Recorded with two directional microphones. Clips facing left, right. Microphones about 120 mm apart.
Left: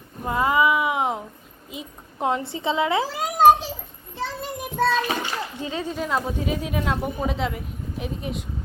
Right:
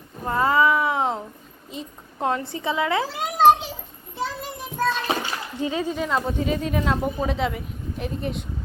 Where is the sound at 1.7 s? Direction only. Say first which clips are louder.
Right 1 dB; 10° left (ahead or behind).